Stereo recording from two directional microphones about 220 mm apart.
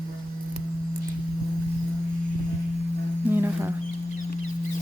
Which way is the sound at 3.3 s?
10° right (ahead or behind).